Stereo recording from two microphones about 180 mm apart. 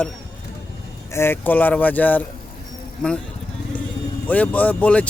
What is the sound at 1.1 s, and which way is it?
Speech, 15° left (ahead or behind).